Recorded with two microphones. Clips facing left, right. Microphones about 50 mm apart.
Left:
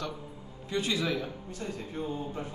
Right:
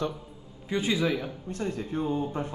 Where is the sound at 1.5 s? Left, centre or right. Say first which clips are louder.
Right 6 dB; right.